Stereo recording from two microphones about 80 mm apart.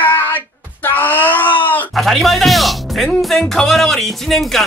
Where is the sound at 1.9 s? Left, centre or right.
Centre.